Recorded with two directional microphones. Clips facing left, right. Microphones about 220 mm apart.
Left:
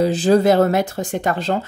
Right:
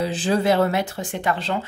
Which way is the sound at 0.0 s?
40° left (ahead or behind).